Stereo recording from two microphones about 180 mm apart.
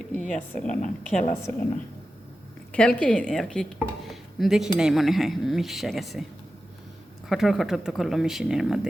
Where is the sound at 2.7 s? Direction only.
5° left (ahead or behind).